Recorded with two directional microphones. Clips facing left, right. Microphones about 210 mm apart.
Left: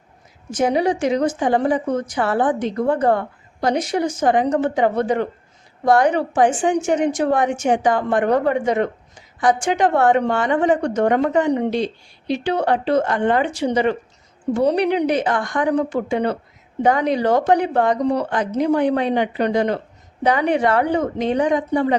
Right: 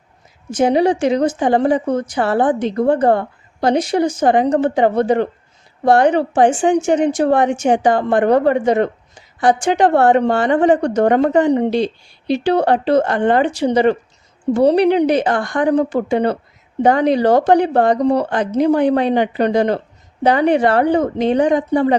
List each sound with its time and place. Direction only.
0.5 s a woman's voice: 30° right (ahead or behind)